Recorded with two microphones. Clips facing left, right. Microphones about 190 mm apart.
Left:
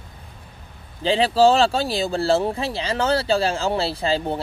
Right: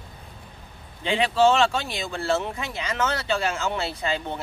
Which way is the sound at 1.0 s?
35° left (ahead or behind).